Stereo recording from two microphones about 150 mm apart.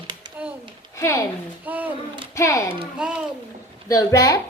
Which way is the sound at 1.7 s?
10° right (ahead or behind).